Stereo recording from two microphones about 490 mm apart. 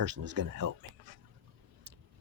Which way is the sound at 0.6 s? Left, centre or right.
Right.